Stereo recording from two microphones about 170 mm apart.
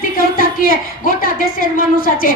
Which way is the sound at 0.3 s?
55° left (ahead or behind).